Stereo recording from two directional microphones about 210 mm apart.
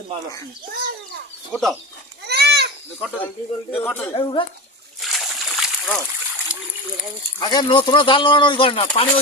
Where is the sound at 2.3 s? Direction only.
50° right (ahead or behind).